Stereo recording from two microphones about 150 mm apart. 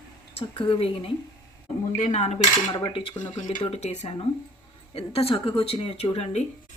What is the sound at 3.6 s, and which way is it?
Speech, 45° left (ahead or behind).